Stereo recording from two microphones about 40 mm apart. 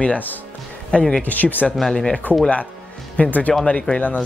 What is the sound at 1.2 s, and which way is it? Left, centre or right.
Speech, left.